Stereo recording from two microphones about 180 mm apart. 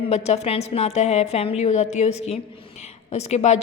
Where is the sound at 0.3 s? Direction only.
35° left (ahead or behind).